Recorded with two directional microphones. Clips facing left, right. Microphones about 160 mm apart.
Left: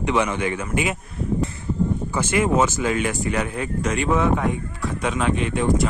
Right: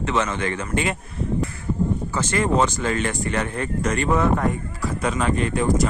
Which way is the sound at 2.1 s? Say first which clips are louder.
Left 2 dB; 10° left (ahead or behind).